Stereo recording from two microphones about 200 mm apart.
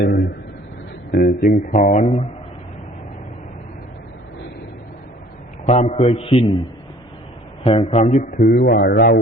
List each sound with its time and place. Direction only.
0.0 s a sound: 60° left (ahead or behind)
1.1 s speech: 55° left (ahead or behind)
1.5 s a man's voice: 30° left (ahead or behind)
5.6 s a man's voice: 30° left (ahead or behind)
7.6 s a man's voice: 25° left (ahead or behind)
8.2 s speech: 50° left (ahead or behind)